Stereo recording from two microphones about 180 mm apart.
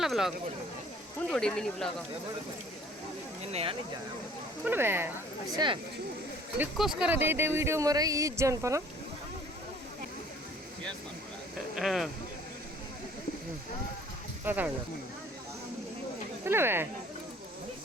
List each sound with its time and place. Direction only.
0.0 s speech: centre (ahead or behind)
3.4 s speech: 35° right (ahead or behind)
4.6 s speech: 10° right (ahead or behind)
5.5 s speech: 25° right (ahead or behind)
6.6 s speech: 5° right (ahead or behind)
11.8 s speech: centre (ahead or behind)
14.4 s speech: 10° right (ahead or behind)
16.4 s speech: 15° right (ahead or behind)